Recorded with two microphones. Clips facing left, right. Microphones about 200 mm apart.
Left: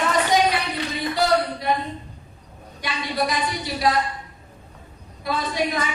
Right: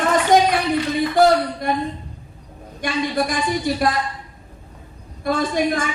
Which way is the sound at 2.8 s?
50° right (ahead or behind).